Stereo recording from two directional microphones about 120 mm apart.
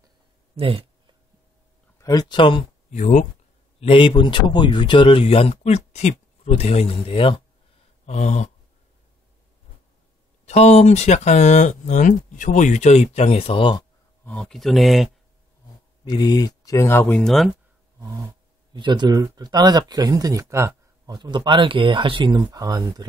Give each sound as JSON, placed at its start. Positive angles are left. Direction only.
{"t": 0.6, "sound": "a sound", "side_deg": -50}
{"t": 2.0, "sound": "speech", "side_deg": 30}
{"t": 2.9, "sound": "speech", "side_deg": 80}
{"t": 3.8, "sound": "speech", "side_deg": 50}
{"t": 8.1, "sound": "speech", "side_deg": 75}
{"t": 10.4, "sound": "speech", "side_deg": 65}
{"t": 14.2, "sound": "speech", "side_deg": 5}
{"t": 16.0, "sound": "speech", "side_deg": 35}
{"t": 17.2, "sound": "speech", "side_deg": 0}
{"t": 18.7, "sound": "speech", "side_deg": -40}
{"t": 21.2, "sound": "speech", "side_deg": -40}